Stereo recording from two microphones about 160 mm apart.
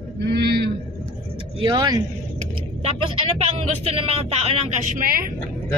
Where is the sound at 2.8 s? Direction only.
35° right (ahead or behind).